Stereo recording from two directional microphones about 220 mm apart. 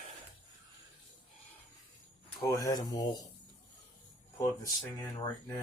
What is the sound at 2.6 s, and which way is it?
Speech, 15° left (ahead or behind).